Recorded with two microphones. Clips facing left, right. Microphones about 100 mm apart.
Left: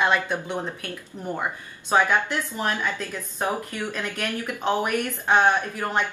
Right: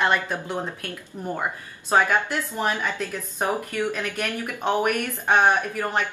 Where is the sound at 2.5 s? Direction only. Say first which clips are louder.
Right 2 dB; 15° right (ahead or behind).